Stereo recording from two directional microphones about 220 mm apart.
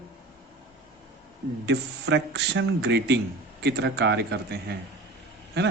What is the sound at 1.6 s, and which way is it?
Speech, 50° right (ahead or behind).